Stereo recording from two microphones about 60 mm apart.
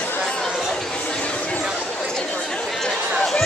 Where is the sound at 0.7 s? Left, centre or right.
Centre.